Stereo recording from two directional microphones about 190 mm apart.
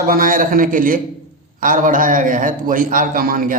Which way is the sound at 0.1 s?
45° right (ahead or behind).